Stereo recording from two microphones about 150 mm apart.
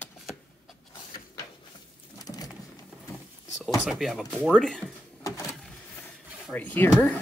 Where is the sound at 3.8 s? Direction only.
Centre (ahead or behind).